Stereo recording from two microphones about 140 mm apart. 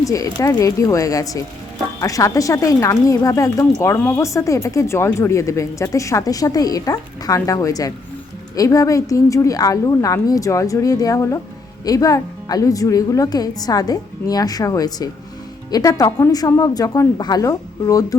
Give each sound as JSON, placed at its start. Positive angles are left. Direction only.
{"t": 0.0, "sound": "speech", "side_deg": 25}